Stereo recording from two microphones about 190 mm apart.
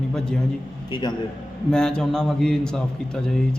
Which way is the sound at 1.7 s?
5° left (ahead or behind).